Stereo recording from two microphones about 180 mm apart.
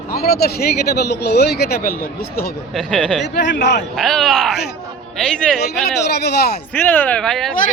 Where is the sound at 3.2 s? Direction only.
70° left (ahead or behind).